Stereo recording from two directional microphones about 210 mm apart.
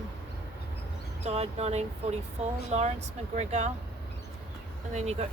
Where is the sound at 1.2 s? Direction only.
30° right (ahead or behind).